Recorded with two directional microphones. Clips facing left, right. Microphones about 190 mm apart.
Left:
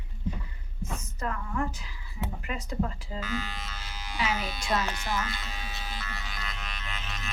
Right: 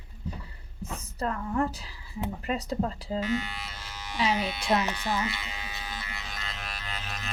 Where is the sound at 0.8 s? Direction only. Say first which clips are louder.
Right 2 dB; 35° right (ahead or behind).